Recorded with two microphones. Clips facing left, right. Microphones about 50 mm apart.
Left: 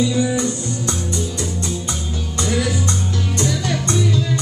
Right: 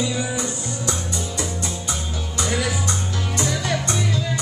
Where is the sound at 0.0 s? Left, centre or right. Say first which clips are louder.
Left 6 dB; centre.